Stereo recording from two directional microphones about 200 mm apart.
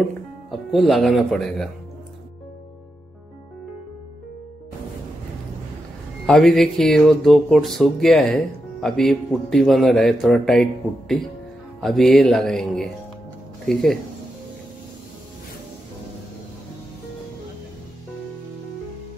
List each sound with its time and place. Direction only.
0.5 s speech: centre (ahead or behind)
6.2 s speech: centre (ahead or behind)